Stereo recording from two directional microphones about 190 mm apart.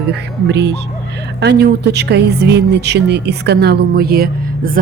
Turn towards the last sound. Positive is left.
turn(degrees=-50)  # may be behind; listen again after turning